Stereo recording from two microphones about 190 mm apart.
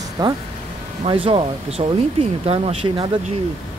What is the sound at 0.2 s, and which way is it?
Speech, 20° right (ahead or behind).